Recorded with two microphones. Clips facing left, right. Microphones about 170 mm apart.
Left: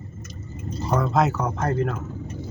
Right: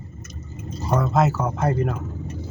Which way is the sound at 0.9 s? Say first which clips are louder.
Right 1 dB; centre (ahead or behind).